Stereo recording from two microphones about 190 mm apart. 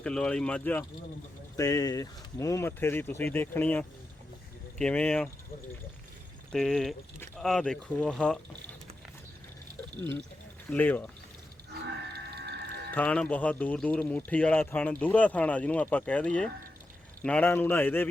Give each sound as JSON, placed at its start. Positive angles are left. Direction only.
{"t": 0.0, "sound": "speech", "side_deg": 5}
{"t": 6.5, "sound": "speech", "side_deg": 5}
{"t": 10.0, "sound": "speech", "side_deg": 10}
{"t": 12.1, "sound": "music", "side_deg": -60}
{"t": 12.9, "sound": "speech", "side_deg": 5}